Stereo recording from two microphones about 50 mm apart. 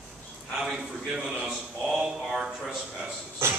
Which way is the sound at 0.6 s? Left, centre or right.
Centre.